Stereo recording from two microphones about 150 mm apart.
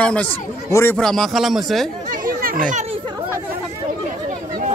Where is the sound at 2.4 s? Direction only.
60° right (ahead or behind).